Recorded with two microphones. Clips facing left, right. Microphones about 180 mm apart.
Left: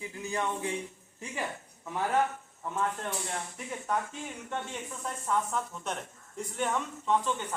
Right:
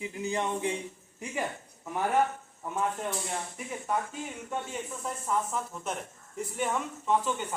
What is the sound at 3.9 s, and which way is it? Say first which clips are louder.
Speech: right 1 dB; 5° right (ahead or behind).